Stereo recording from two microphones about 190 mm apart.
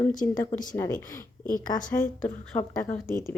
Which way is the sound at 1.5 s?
45° left (ahead or behind).